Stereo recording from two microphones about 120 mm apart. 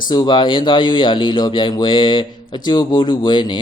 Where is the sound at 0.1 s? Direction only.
40° left (ahead or behind).